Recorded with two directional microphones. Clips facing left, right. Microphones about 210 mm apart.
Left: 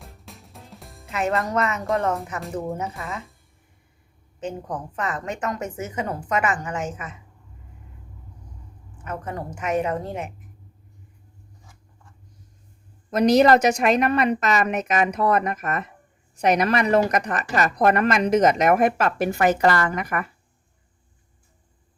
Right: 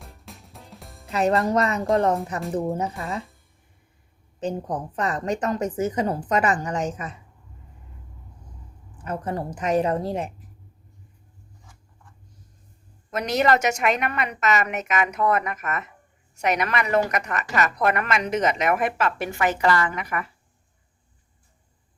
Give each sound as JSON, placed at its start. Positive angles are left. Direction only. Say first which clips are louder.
{"t": 0.0, "sound": "music", "louder": "even", "side_deg": 0}
{"t": 1.1, "sound": "speech", "louder": "right 3 dB", "side_deg": -35}
{"t": 4.4, "sound": "speech", "louder": "right 3 dB", "side_deg": -35}
{"t": 9.0, "sound": "speech", "louder": "right 3 dB", "side_deg": -35}
{"t": 13.1, "sound": "a woman's voice", "louder": "left 6 dB", "side_deg": 35}